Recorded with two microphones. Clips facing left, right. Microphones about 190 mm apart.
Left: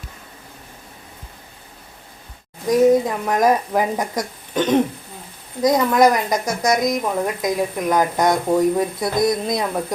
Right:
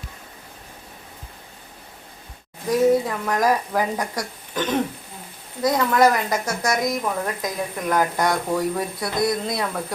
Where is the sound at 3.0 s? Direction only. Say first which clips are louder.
Left 4 dB; 20° left (ahead or behind).